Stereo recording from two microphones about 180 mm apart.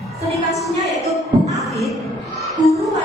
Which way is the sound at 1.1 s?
Centre (ahead or behind).